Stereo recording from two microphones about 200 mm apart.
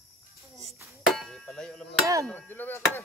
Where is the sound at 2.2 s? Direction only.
10° left (ahead or behind).